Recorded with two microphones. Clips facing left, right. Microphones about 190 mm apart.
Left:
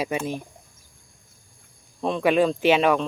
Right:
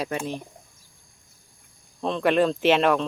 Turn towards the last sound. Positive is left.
turn(degrees=0)  # may be behind; listen again after turning